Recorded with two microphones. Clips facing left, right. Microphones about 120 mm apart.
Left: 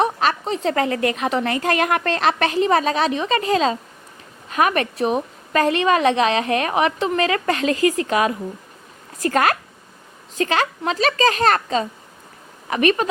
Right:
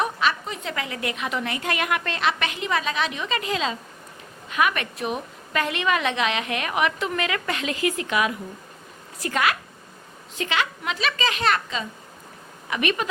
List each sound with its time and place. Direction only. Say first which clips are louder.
0.0 s a woman's voice: left 5 dB; 35° left (ahead or behind)